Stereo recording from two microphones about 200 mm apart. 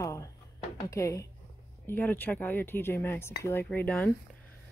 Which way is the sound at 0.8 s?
15° left (ahead or behind).